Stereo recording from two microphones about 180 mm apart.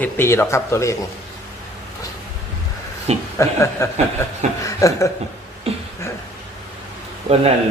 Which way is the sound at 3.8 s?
15° left (ahead or behind).